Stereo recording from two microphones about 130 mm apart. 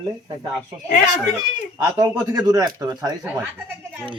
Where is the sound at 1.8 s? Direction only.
25° right (ahead or behind).